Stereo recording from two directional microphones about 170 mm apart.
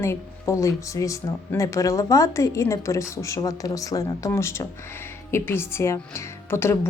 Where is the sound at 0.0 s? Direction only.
15° left (ahead or behind).